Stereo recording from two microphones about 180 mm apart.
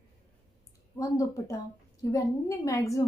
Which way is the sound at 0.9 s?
15° left (ahead or behind).